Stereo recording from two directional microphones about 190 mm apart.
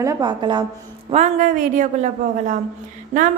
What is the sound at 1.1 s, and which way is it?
Speech, 40° right (ahead or behind).